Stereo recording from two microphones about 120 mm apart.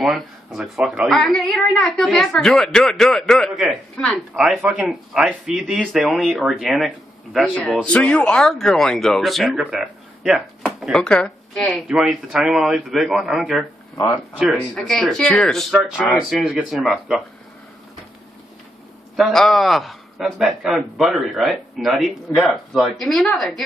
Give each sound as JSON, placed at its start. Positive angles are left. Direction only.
{"t": 0.0, "sound": "a man's voice", "side_deg": 0}
{"t": 10.8, "sound": "a man's voice", "side_deg": 10}
{"t": 19.1, "sound": "a man's voice", "side_deg": 0}